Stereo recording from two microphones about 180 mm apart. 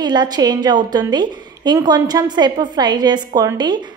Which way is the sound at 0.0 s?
25° right (ahead or behind).